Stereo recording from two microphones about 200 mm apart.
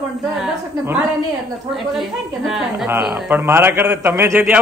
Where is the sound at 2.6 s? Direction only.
5° right (ahead or behind).